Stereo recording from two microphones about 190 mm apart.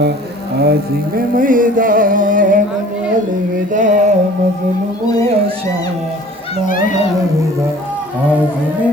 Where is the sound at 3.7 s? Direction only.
40° right (ahead or behind).